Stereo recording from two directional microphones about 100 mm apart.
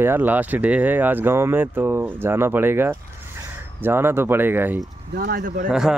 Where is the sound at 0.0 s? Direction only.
20° right (ahead or behind).